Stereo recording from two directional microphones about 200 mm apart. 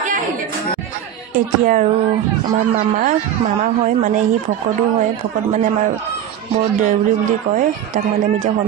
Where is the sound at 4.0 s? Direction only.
40° right (ahead or behind).